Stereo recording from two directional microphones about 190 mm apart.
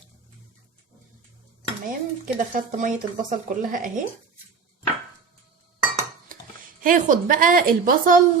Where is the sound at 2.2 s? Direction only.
45° right (ahead or behind).